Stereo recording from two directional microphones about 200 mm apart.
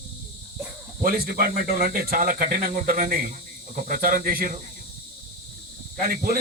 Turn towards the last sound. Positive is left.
turn(degrees=-45)  # may be behind; listen again after turning